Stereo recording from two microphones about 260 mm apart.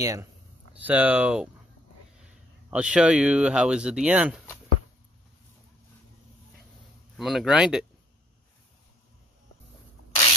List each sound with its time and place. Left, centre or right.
0.0 s speech: centre
2.7 s speech: centre
7.2 s speech: centre